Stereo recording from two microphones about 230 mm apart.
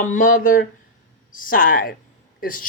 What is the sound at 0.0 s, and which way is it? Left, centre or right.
Speech, left.